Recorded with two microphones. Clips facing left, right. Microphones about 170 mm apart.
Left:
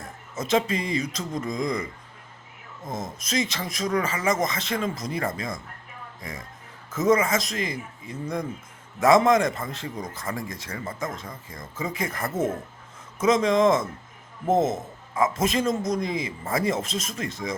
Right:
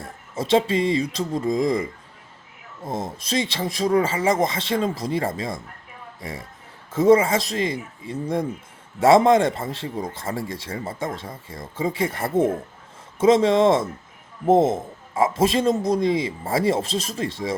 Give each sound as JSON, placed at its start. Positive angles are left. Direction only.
{"t": 0.0, "sound": "speech", "side_deg": -30}
{"t": 6.9, "sound": "speech", "side_deg": -30}